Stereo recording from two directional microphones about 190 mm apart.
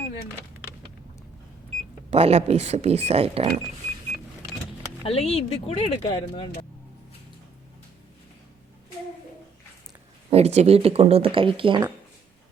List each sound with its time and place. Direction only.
2.0 s speech: 35° right (ahead or behind)
5.0 s speech: 30° left (ahead or behind)
10.2 s speech: 35° right (ahead or behind)